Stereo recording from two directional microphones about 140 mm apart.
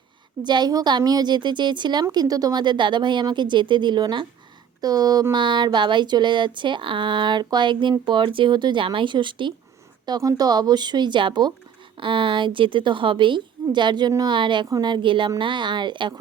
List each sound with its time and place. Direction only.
0.4 s a woman's voice: 30° right (ahead or behind)